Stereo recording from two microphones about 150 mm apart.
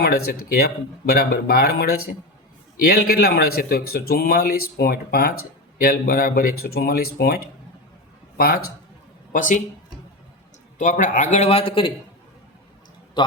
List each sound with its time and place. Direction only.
0.0 s a man's voice: 85° left
9.3 s speech: 60° left (ahead or behind)
10.8 s a man's voice: 55° left (ahead or behind); by 11.9 s 35° left (ahead or behind)
13.2 s a man's voice: 30° left (ahead or behind)